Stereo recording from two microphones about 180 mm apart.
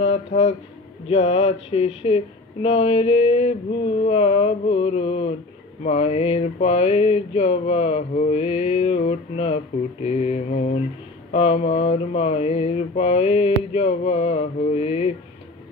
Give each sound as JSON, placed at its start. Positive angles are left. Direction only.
{"t": 0.1, "sound": "speech", "side_deg": 40}